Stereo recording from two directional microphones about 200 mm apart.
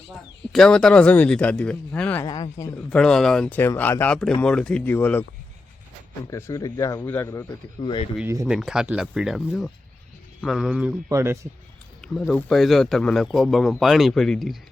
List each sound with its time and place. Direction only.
0.5 s speech: 5° left (ahead or behind)
2.2 s speech: 20° left (ahead or behind)
2.7 s speech: 5° left (ahead or behind)
6.2 s speech: 15° left (ahead or behind)
7.8 s speech: 25° left (ahead or behind)
8.2 s a man's voice: 10° right (ahead or behind)
12.0 s speech: 5° left (ahead or behind)